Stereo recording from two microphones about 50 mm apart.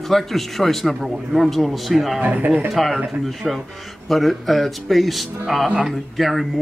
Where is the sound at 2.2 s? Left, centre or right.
Right.